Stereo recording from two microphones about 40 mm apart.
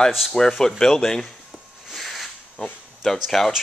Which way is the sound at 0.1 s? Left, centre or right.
Centre.